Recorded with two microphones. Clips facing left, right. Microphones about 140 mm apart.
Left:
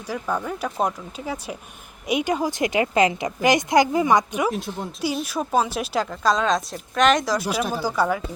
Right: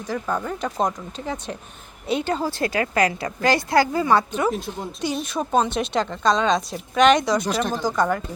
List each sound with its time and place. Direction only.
0.1 s a woman's voice: 5° left (ahead or behind)
4.5 s speech: centre (ahead or behind)